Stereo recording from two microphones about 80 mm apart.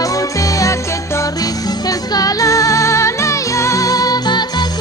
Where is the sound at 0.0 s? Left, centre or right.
Left.